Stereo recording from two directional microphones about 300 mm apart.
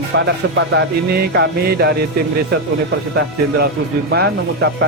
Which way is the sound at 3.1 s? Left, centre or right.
Right.